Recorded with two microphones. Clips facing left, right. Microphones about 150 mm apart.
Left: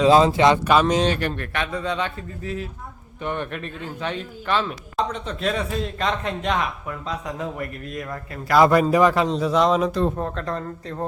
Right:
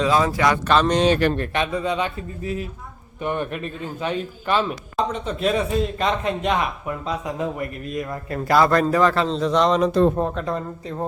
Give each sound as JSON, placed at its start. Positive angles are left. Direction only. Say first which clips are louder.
{"t": 0.0, "sound": "speech", "louder": "left 4 dB", "side_deg": 25}
{"t": 0.7, "sound": "speech", "louder": "even", "side_deg": 5}
{"t": 1.4, "sound": "speech", "louder": "right 4 dB", "side_deg": -20}
{"t": 8.5, "sound": "a man's voice", "louder": "left 2 dB", "side_deg": 10}
{"t": 10.2, "sound": "speech", "louder": "right 3 dB", "side_deg": -15}